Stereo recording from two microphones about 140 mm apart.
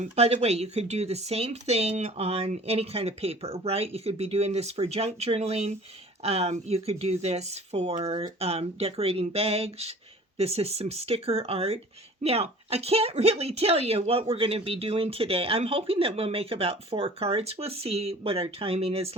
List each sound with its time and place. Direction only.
0.0 s speech: 55° right (ahead or behind)